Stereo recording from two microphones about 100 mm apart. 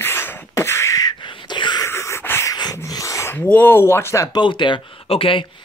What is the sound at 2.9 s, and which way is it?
Snort, 35° left (ahead or behind).